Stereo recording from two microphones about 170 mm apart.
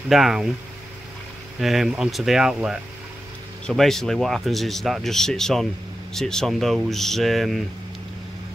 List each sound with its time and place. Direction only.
0.1 s speech: centre (ahead or behind)
1.6 s speech: centre (ahead or behind)